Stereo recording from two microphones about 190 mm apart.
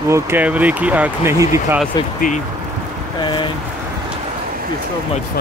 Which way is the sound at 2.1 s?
45° left (ahead or behind).